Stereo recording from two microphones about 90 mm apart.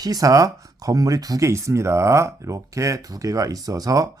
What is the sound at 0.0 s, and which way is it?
Speech, 40° right (ahead or behind).